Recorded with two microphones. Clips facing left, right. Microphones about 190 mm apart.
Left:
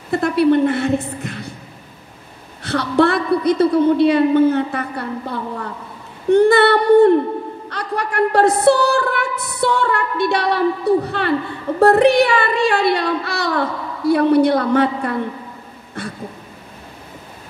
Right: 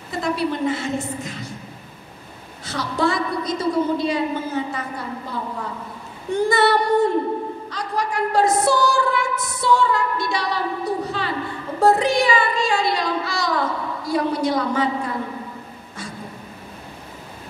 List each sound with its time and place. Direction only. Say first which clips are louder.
0.1 s a woman's voice: left 9 dB; 60° left (ahead or behind)
2.6 s a woman's voice: left 7 dB; 65° left (ahead or behind)